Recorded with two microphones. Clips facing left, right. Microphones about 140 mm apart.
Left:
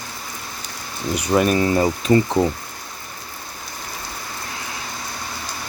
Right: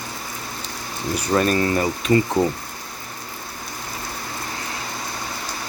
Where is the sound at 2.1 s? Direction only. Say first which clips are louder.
Left 2 dB; 25° left (ahead or behind).